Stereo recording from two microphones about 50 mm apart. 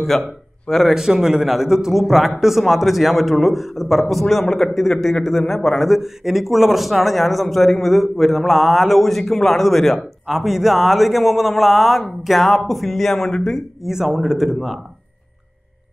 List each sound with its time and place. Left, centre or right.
0.1 s a man's voice: centre
0.9 s a man's voice: centre
13.8 s speech: centre